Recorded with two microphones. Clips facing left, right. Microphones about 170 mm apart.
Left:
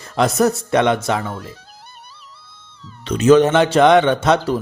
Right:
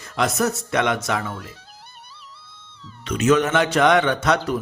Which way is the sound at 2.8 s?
30° left (ahead or behind).